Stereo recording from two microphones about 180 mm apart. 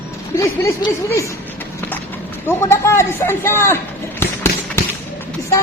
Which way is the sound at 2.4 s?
15° left (ahead or behind).